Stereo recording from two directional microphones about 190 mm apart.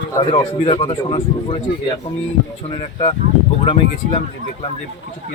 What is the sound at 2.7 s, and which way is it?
Speech, 30° left (ahead or behind).